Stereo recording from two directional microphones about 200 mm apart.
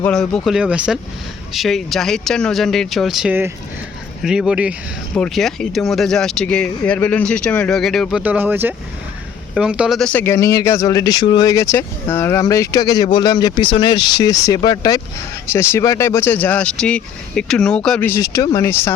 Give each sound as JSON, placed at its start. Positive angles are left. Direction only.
{"t": 0.0, "sound": "speech", "side_deg": 5}
{"t": 8.2, "sound": "speech", "side_deg": -10}